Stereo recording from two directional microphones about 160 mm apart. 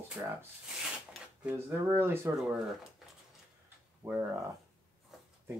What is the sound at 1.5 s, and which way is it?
Speech, 15° right (ahead or behind).